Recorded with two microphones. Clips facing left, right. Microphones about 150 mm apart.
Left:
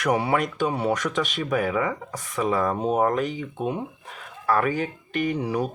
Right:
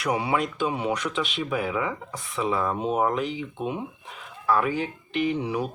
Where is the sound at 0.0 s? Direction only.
45° left (ahead or behind).